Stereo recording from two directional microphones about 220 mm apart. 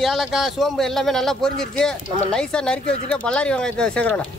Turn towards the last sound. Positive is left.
turn(degrees=5)  # may be behind; listen again after turning